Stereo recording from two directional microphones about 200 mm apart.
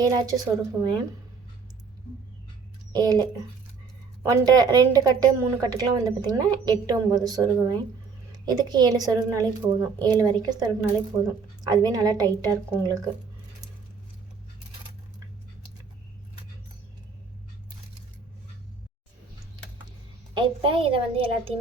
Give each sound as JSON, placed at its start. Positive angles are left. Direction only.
{"t": 0.0, "sound": "a woman's voice", "side_deg": -20}
{"t": 2.9, "sound": "a woman's voice", "side_deg": -20}
{"t": 20.3, "sound": "a woman's voice", "side_deg": -25}